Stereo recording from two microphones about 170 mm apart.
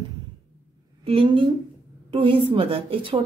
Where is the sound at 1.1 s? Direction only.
30° right (ahead or behind).